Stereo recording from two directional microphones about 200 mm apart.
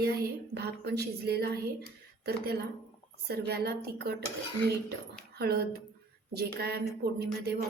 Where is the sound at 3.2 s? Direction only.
55° right (ahead or behind).